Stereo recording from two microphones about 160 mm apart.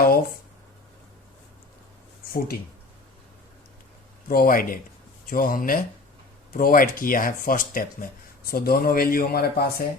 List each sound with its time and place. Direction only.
2.2 s speech: 70° left (ahead or behind)
4.3 s speech: 65° left (ahead or behind)